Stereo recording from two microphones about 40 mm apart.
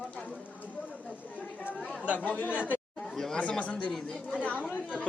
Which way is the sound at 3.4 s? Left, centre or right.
Left.